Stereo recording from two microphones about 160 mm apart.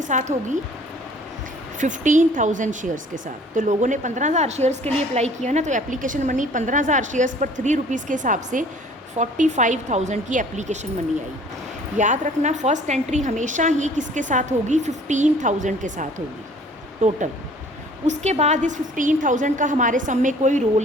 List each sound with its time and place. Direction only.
0.0 s a woman's voice: 50° right (ahead or behind)
1.8 s a woman's voice: 50° right (ahead or behind)
11.9 s a woman's voice: 50° right (ahead or behind)